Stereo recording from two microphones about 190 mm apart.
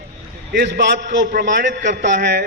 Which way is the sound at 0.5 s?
65° right (ahead or behind).